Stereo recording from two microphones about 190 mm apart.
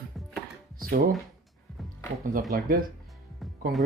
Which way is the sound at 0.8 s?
50° right (ahead or behind).